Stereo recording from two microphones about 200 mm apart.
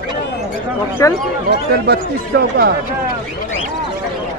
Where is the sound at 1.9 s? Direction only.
55° right (ahead or behind).